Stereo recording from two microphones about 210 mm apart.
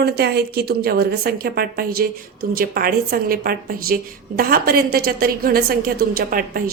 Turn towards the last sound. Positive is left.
turn(degrees=-45)  # may be behind; listen again after turning